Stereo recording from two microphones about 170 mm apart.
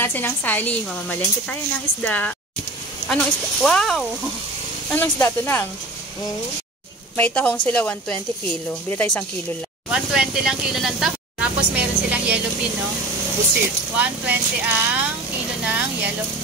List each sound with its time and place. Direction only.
0.0 s a woman's voice: 10° left (ahead or behind)
7.2 s a woman's voice: 10° left (ahead or behind); by 12.4 s 10° right (ahead or behind)
13.9 s speech: 10° right (ahead or behind)
15.6 s vehicle: 10° right (ahead or behind)